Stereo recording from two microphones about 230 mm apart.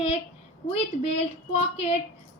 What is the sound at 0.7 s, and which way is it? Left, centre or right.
A woman's voice, left.